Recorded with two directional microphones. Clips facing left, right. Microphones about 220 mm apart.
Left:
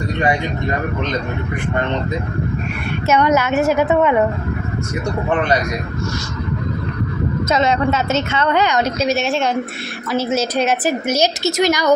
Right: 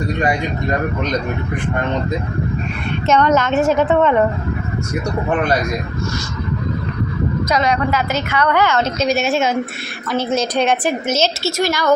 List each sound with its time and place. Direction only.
3.1 s a woman's voice: 10° left (ahead or behind)
7.5 s a woman's voice: 25° left (ahead or behind)